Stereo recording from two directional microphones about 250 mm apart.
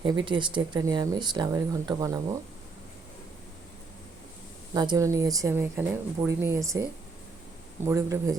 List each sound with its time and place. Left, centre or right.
0.3 s speech: centre
4.7 s speech: centre
7.9 s speech: centre